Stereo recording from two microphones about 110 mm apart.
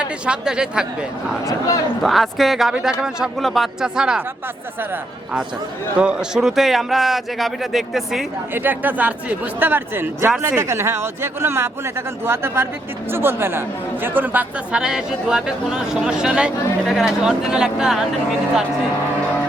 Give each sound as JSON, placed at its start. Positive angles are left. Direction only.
{"t": 0.0, "sound": "speech", "side_deg": -10}
{"t": 1.5, "sound": "a man's voice", "side_deg": 30}
{"t": 2.0, "sound": "a man's voice", "side_deg": 0}
{"t": 6.0, "sound": "a man's voice", "side_deg": -10}
{"t": 8.5, "sound": "speech", "side_deg": -15}